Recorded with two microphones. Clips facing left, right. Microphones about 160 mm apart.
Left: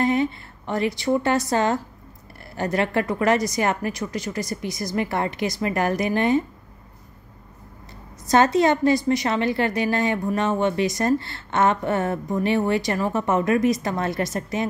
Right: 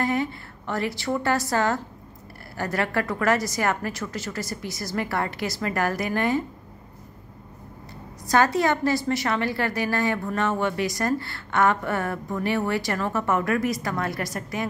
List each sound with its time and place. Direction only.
0.0 s a woman's voice: 20° left (ahead or behind)
8.3 s a woman's voice: 20° left (ahead or behind)